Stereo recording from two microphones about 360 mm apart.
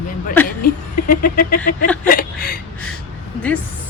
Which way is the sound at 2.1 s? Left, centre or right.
Left.